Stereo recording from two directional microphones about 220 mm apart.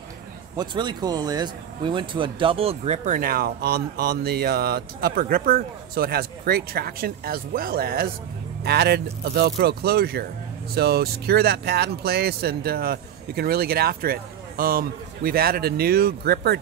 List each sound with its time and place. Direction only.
0.6 s speech: 20° right (ahead or behind); by 16.5 s 45° right (ahead or behind)